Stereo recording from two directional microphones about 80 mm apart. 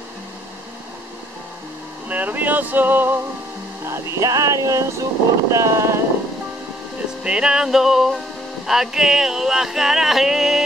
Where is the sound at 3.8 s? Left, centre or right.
Right.